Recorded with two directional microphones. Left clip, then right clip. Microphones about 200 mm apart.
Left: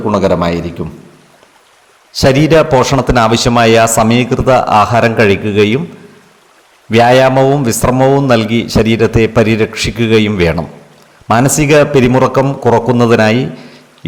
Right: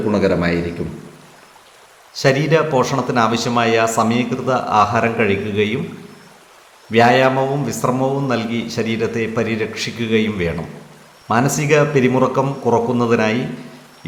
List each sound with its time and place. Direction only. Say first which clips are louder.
0.1 s a man's voice: left 6 dB; 30° left (ahead or behind)
2.1 s speech: left 7 dB; 45° left (ahead or behind)
6.9 s speech: left 6 dB; 50° left (ahead or behind)
14.0 s a sound: left 9 dB; 45° left (ahead or behind)